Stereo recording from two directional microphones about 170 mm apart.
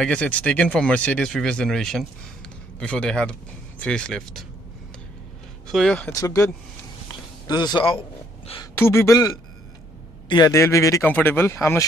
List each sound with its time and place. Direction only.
0.0 s speech: 5° left (ahead or behind)
5.7 s speech: 5° left (ahead or behind)
6.1 s a man's voice: 20° left (ahead or behind)
8.7 s speech: 15° left (ahead or behind)